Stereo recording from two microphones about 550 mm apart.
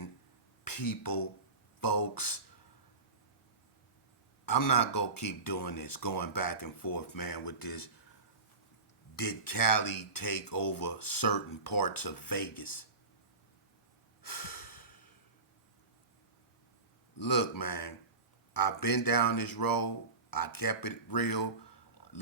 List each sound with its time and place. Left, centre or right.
0.6 s speech: left
4.4 s speech: left
9.1 s speech: left
14.2 s snort: left
17.2 s speech: left